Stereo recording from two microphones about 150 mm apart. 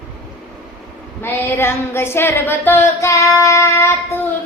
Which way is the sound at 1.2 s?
15° left (ahead or behind).